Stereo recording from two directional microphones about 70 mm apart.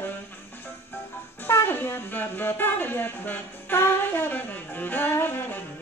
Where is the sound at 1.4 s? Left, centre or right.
Left.